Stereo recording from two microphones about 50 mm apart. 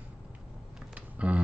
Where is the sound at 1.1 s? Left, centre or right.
Right.